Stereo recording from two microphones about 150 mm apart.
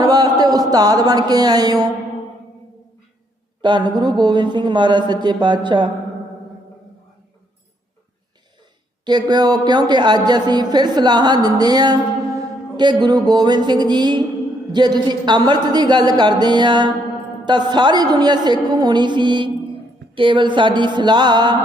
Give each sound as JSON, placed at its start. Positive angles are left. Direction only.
{"t": 0.0, "sound": "speech", "side_deg": -25}
{"t": 3.6, "sound": "a woman's voice", "side_deg": -30}
{"t": 9.0, "sound": "a woman's voice", "side_deg": -30}